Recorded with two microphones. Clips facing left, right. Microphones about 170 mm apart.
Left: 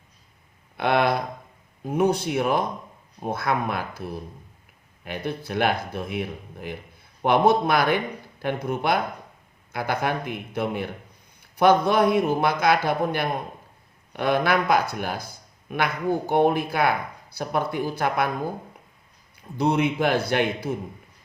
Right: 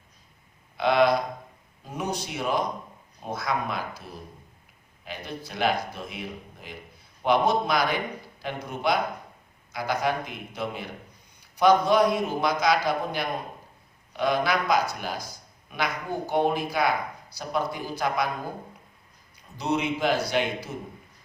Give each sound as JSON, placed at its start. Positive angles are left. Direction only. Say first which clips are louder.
{"t": 0.8, "sound": "speech", "louder": "right 1 dB", "side_deg": 55}
{"t": 19.4, "sound": "speech", "louder": "left 5 dB", "side_deg": 55}